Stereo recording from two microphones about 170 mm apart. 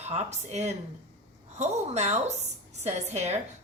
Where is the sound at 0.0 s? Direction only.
40° right (ahead or behind).